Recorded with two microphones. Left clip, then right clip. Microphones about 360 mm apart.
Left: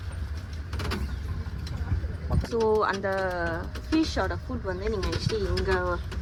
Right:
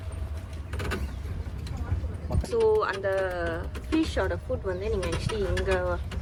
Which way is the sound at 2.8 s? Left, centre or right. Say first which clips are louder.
Even; centre.